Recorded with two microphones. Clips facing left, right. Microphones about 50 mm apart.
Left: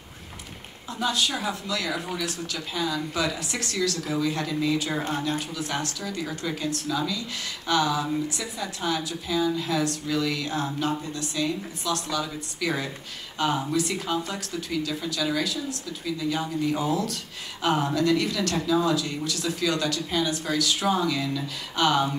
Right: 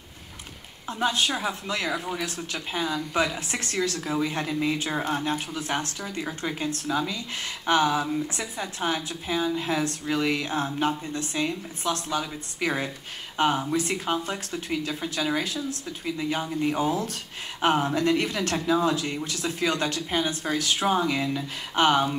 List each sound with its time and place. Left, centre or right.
0.8 s speech: right